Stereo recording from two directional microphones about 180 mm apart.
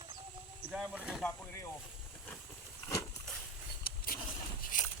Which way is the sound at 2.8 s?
20° left (ahead or behind).